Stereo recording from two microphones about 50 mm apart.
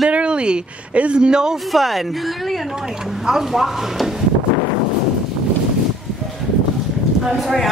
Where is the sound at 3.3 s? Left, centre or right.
Centre.